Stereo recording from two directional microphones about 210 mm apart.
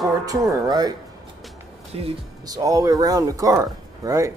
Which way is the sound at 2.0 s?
20° right (ahead or behind).